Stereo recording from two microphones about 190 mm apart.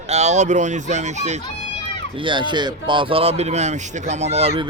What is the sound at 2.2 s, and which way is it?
Speech, 25° right (ahead or behind).